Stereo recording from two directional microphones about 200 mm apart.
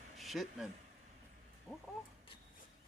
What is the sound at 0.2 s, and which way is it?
Speech, centre (ahead or behind).